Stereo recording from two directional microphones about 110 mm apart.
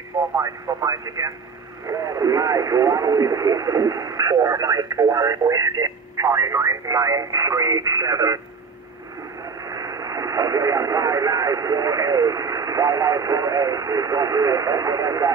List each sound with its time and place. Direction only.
0.4 s speech: 30° right (ahead or behind)
9.7 s speech: 35° right (ahead or behind)